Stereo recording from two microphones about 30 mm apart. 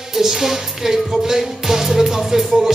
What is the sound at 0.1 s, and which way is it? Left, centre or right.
Music, centre.